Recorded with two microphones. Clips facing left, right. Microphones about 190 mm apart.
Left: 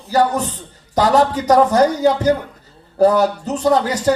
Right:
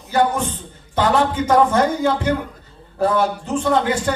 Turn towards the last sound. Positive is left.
turn(degrees=40)  # may be behind; listen again after turning